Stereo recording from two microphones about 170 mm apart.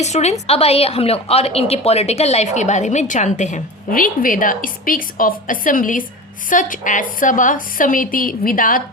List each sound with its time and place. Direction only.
0.0 s a woman's voice: 40° left (ahead or behind)